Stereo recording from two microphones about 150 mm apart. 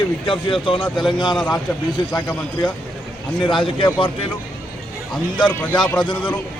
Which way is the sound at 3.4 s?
35° left (ahead or behind).